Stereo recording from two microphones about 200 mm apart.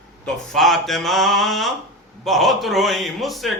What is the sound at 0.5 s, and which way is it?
A man's voice, centre (ahead or behind).